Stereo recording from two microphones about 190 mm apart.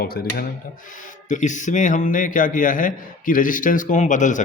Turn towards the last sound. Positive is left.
turn(degrees=40)  # may be behind; listen again after turning